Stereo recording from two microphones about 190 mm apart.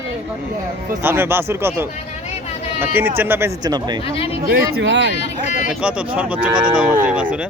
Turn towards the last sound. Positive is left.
turn(degrees=-5)  # may be behind; listen again after turning